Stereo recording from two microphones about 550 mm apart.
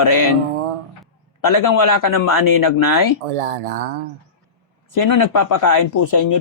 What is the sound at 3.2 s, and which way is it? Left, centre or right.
Speech, right.